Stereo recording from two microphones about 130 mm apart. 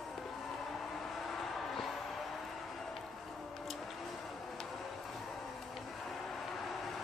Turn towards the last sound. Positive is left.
turn(degrees=0)  # may be behind; listen again after turning